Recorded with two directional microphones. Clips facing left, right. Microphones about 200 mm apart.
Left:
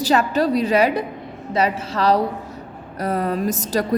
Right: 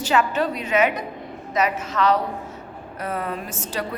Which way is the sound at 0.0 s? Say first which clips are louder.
Left 3 dB; 35° left (ahead or behind).